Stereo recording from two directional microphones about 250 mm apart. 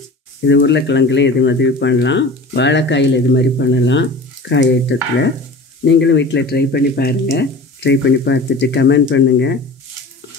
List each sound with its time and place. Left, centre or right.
0.5 s speech: left